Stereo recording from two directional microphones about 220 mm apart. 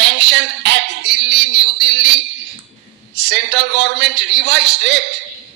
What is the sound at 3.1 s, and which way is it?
A man's voice, 55° right (ahead or behind).